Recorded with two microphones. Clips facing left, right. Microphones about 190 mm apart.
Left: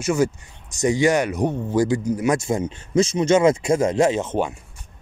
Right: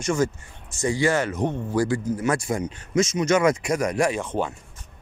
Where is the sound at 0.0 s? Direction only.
10° left (ahead or behind).